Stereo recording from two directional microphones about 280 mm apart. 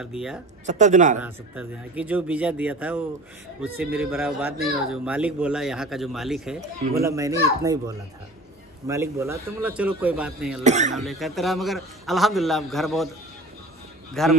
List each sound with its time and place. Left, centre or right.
0.1 s speech: centre
0.7 s speech: right
1.2 s speech: centre
6.6 s speech: right
7.0 s a child's voice: centre
10.6 s speech: right
11.0 s speech: centre
14.2 s speech: centre